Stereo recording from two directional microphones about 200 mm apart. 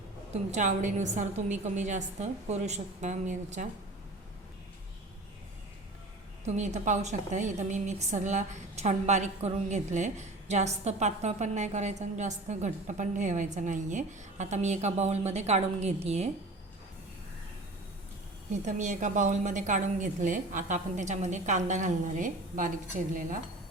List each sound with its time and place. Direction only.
0.5 s a woman's voice: 40° right (ahead or behind)
6.4 s a woman's voice: 35° right (ahead or behind)
18.6 s a woman's voice: 40° right (ahead or behind)